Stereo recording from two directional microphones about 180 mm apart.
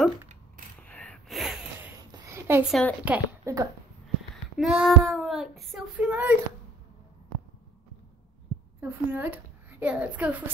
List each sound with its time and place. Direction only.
0.8 s gasp: 5° left (ahead or behind)
2.1 s a sound: 15° right (ahead or behind)
2.7 s speech: 10° left (ahead or behind)
3.1 s speech: 15° right (ahead or behind)
4.6 s speech: centre (ahead or behind)
8.8 s a woman's voice: 10° right (ahead or behind)